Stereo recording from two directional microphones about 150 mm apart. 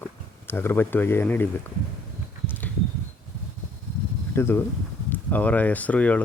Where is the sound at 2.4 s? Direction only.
15° left (ahead or behind).